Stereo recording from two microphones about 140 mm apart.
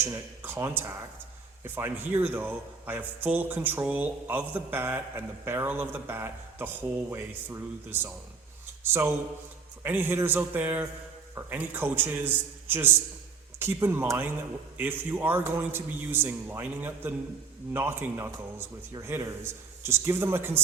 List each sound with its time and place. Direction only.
0.0 s a man's voice: 15° right (ahead or behind)